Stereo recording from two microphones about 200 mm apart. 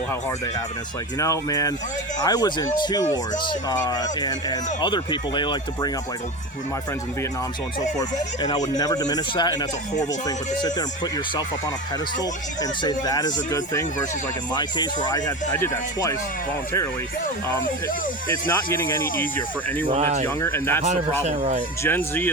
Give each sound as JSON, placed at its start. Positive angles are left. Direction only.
{"t": 1.2, "sound": "speech", "side_deg": 15}
{"t": 7.9, "sound": "speech", "side_deg": 20}
{"t": 12.8, "sound": "speech", "side_deg": 20}
{"t": 18.4, "sound": "speech", "side_deg": 10}
{"t": 19.9, "sound": "speech", "side_deg": -35}
{"t": 20.2, "sound": "speech", "side_deg": 10}
{"t": 20.8, "sound": "speech", "side_deg": -35}
{"t": 21.8, "sound": "speech", "side_deg": 10}